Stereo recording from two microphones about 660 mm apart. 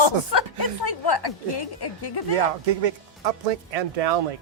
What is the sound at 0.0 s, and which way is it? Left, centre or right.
Speech, left.